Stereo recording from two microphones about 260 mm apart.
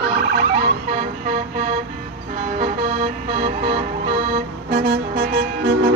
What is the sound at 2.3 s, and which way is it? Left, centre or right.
Music, right.